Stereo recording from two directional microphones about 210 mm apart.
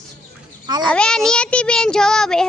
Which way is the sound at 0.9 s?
5° left (ahead or behind).